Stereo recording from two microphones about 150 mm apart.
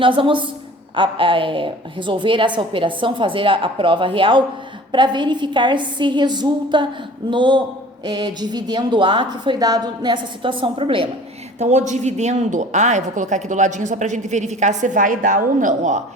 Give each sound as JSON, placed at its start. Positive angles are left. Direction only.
{"t": 0.0, "sound": "a woman's voice", "side_deg": -35}
{"t": 11.6, "sound": "a woman's voice", "side_deg": -50}